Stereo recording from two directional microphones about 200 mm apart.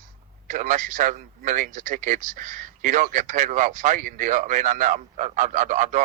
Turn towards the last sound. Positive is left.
turn(degrees=-40)  # may be behind; listen again after turning